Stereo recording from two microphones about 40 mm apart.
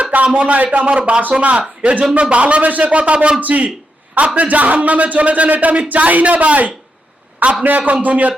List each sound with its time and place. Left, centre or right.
0.0 s a sound: right
0.3 s speech: right
0.9 s a man's voice: right